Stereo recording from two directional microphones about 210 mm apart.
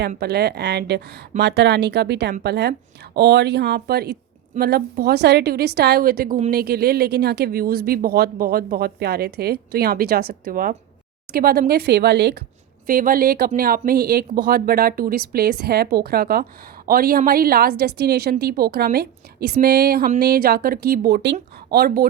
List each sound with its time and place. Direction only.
0.1 s speech: 50° right (ahead or behind)